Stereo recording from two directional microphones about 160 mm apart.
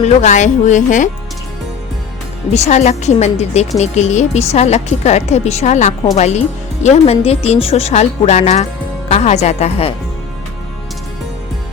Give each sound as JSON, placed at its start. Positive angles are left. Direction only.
{"t": 0.0, "sound": "a woman's voice", "side_deg": 45}
{"t": 2.5, "sound": "a woman's voice", "side_deg": 45}